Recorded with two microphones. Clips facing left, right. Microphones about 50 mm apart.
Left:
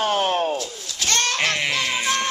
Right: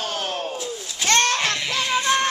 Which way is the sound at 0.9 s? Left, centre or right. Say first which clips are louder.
Right 4 dB; centre.